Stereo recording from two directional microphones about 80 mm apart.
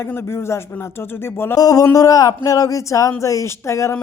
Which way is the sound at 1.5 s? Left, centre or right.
Left.